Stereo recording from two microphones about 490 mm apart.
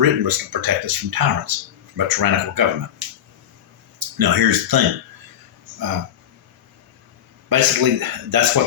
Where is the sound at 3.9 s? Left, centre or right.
Right.